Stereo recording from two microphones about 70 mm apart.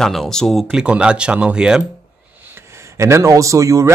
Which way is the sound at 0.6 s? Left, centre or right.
Centre.